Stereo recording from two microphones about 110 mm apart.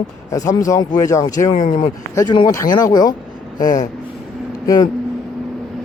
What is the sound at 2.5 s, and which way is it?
Speech, 30° left (ahead or behind).